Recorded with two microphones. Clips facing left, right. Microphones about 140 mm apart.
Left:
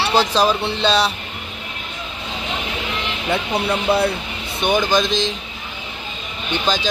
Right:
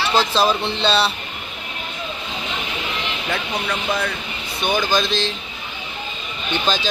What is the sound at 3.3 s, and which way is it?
Speech, 30° left (ahead or behind).